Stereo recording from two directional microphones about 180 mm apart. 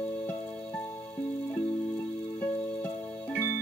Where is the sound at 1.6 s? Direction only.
10° left (ahead or behind).